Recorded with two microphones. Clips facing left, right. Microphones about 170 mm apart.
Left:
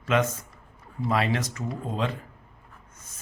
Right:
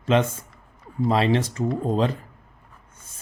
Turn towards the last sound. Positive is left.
turn(degrees=-30)  # may be behind; listen again after turning